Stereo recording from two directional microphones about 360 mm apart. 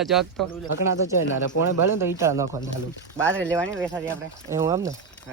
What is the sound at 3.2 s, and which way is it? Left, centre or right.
Speech, centre.